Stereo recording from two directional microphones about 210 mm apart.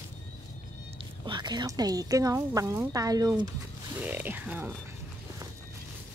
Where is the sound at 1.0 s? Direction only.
20° right (ahead or behind).